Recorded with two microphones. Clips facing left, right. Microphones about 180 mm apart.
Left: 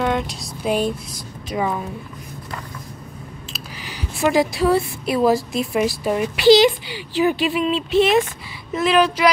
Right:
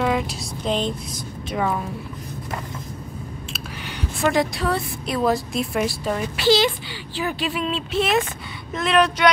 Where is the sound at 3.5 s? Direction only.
Centre (ahead or behind).